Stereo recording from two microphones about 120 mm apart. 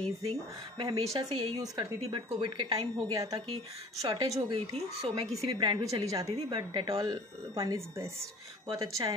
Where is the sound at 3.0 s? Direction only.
30° right (ahead or behind).